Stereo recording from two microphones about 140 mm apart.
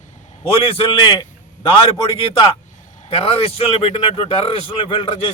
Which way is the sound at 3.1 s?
45° left (ahead or behind).